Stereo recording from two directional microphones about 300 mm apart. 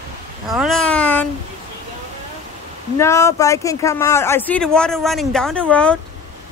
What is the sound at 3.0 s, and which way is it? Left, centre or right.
Speech, centre.